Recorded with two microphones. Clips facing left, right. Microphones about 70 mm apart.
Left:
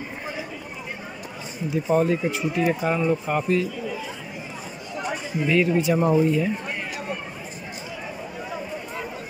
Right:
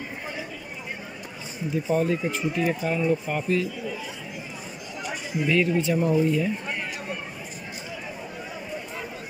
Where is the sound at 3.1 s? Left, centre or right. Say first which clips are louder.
Left 2 dB; left.